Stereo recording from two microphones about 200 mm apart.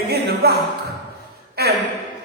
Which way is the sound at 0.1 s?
55° right (ahead or behind).